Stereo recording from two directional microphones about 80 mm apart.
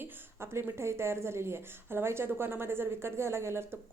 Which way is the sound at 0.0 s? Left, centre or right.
Right.